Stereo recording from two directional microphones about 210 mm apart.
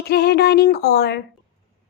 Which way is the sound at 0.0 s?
50° left (ahead or behind).